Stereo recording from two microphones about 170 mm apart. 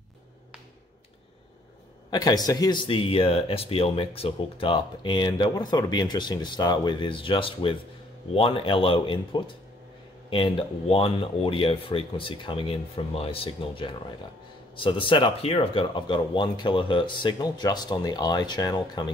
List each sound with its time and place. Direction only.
2.0 s speech: 25° left (ahead or behind)